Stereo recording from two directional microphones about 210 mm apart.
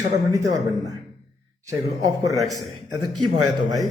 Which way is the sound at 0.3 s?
15° right (ahead or behind).